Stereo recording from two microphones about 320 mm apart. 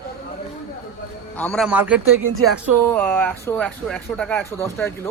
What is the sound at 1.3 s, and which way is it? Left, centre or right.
Speech, centre.